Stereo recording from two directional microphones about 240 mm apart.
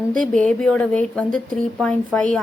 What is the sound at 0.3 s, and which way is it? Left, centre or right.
A woman's voice, centre.